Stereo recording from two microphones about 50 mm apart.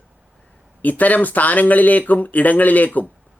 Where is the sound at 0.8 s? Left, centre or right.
Left.